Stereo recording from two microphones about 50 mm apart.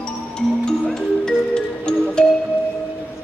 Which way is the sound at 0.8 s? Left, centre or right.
Centre.